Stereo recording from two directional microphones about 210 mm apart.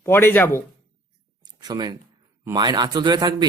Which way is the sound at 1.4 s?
20° right (ahead or behind).